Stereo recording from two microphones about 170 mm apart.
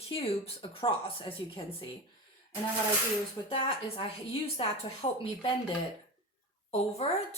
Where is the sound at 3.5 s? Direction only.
35° left (ahead or behind).